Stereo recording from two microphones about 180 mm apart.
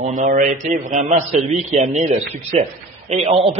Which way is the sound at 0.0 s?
45° right (ahead or behind).